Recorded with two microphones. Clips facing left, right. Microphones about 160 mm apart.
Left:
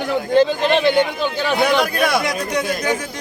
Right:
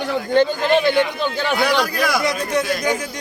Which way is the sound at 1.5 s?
20° left (ahead or behind).